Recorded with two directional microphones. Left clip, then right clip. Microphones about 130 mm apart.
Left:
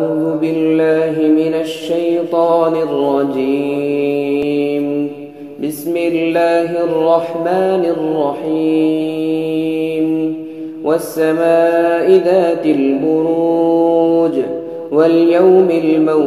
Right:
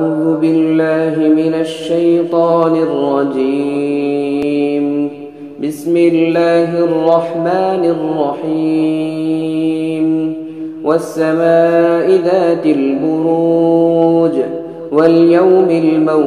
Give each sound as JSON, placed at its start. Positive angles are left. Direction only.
{"t": 0.4, "sound": "mantra", "side_deg": 30}
{"t": 5.9, "sound": "mantra", "side_deg": 30}
{"t": 10.9, "sound": "mantra", "side_deg": 30}